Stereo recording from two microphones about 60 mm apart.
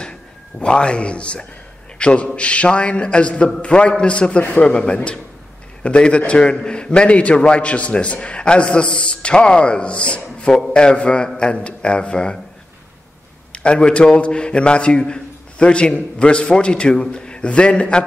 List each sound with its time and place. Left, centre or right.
0.0 s a man's voice: centre
13.5 s a man's voice: centre